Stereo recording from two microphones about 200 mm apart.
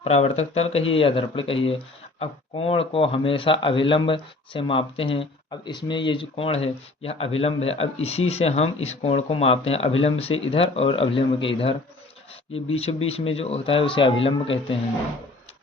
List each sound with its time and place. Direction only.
0.0 s speech: 30° left (ahead or behind)
12.7 s speech: 30° left (ahead or behind)